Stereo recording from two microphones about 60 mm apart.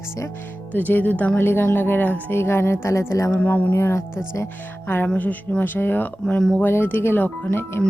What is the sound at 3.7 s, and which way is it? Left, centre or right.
Speech, left.